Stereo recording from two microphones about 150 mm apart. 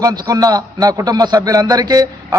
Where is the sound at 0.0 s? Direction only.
25° right (ahead or behind).